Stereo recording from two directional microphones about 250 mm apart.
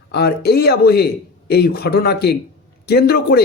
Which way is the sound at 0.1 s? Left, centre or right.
Left.